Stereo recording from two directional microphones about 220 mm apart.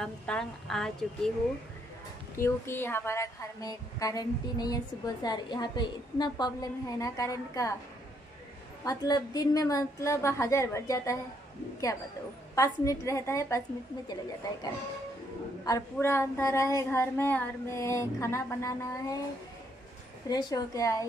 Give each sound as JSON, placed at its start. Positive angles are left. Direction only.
{"t": 0.0, "sound": "a woman's voice", "side_deg": 0}
{"t": 2.3, "sound": "a woman's voice", "side_deg": 10}
{"t": 8.8, "sound": "a woman's voice", "side_deg": 15}
{"t": 12.5, "sound": "a woman's voice", "side_deg": 15}
{"t": 15.6, "sound": "a woman's voice", "side_deg": 15}
{"t": 20.2, "sound": "a woman's voice", "side_deg": 20}